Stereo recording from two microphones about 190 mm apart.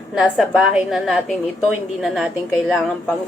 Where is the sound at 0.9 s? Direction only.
Centre (ahead or behind).